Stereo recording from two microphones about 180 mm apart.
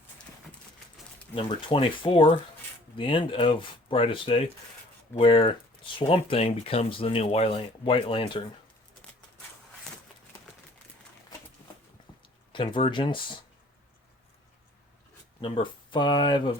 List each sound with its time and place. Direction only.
1.4 s speech: 30° left (ahead or behind)
12.5 s speech: 30° left (ahead or behind)
15.4 s speech: 30° left (ahead or behind)